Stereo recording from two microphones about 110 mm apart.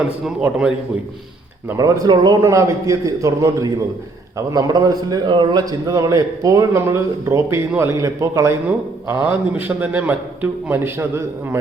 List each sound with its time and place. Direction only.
1.7 s a man's voice: 30° right (ahead or behind)
2.4 s a man's voice: 30° right (ahead or behind)
8.6 s a man's voice: 20° right (ahead or behind)